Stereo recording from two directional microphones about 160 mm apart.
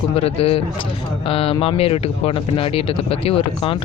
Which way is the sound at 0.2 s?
40° left (ahead or behind).